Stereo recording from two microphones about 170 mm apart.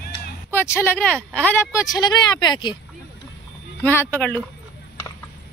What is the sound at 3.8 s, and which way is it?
Speech, 10° left (ahead or behind).